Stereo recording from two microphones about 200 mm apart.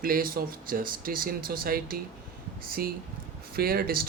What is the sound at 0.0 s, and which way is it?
Speech, 45° right (ahead or behind).